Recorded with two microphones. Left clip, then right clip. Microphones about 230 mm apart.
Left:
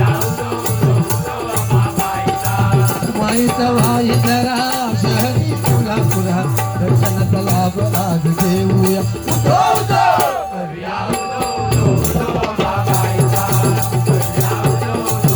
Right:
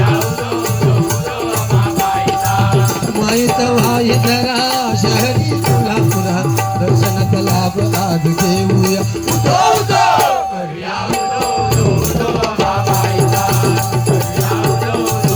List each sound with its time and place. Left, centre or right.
3.2 s music: right
8.4 s music: right